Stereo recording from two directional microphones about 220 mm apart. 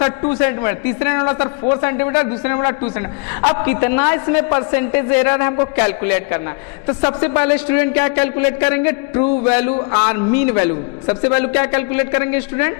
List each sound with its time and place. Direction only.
0.0 s a man's voice: 20° left (ahead or behind)